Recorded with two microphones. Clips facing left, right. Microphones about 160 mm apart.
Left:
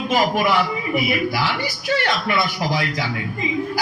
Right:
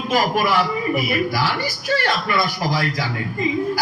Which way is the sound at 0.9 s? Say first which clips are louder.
Left 3 dB; 40° right (ahead or behind).